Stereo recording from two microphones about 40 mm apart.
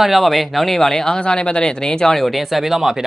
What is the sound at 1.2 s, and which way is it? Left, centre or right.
Speech, left.